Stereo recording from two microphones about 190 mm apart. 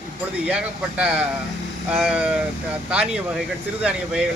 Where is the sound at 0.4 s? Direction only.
5° right (ahead or behind).